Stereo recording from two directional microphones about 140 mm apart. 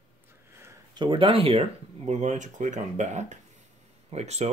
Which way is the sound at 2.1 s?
55° right (ahead or behind).